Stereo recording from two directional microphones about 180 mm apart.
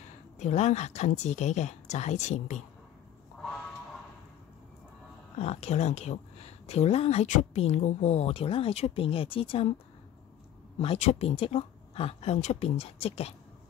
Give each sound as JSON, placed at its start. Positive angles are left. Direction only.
{"t": 0.4, "sound": "speech", "side_deg": 40}
{"t": 5.4, "sound": "speech", "side_deg": 35}
{"t": 10.8, "sound": "speech", "side_deg": 35}